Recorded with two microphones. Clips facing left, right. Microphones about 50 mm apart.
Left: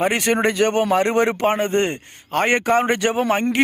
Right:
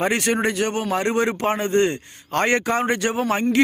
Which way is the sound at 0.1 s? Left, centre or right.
Left.